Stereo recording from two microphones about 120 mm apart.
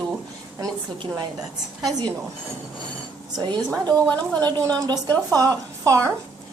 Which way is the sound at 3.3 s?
35° right (ahead or behind).